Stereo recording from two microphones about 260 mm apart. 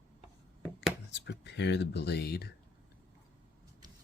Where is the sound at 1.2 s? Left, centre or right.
Left.